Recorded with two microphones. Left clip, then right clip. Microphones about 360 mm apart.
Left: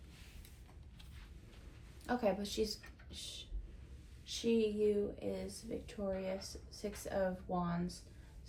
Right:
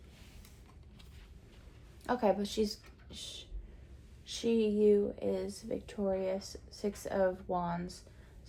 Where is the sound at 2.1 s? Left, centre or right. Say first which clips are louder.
Right 5 dB; right.